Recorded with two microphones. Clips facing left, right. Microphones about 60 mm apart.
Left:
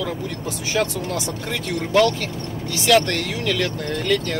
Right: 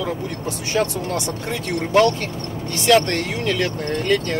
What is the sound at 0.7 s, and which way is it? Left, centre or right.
Speech, right.